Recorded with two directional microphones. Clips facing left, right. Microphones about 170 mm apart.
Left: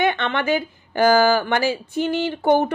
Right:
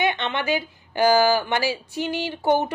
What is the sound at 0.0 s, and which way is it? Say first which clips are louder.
A woman's voice: left 3 dB; 50° left (ahead or behind).